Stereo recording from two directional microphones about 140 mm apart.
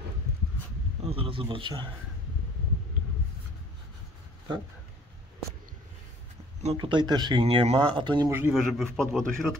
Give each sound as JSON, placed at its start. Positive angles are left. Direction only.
{"t": 1.0, "sound": "a man's voice", "side_deg": -40}
{"t": 6.6, "sound": "speech", "side_deg": -50}
{"t": 6.9, "sound": "a man's voice", "side_deg": -30}
{"t": 7.4, "sound": "speech", "side_deg": -45}
{"t": 7.9, "sound": "a man's voice", "side_deg": -35}
{"t": 8.3, "sound": "a man's voice", "side_deg": -15}
{"t": 8.5, "sound": "a man's voice", "side_deg": 0}